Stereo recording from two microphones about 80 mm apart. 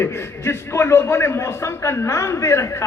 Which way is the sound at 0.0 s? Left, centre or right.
Left.